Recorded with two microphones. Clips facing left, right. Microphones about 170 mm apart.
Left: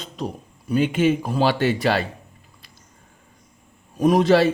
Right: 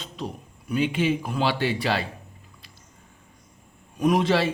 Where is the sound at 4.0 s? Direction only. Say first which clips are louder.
Left 5 dB; 40° left (ahead or behind).